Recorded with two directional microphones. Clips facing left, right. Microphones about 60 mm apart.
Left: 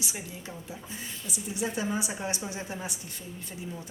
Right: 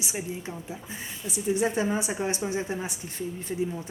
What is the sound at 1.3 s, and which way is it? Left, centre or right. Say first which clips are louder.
A woman's voice: right 7 dB; right.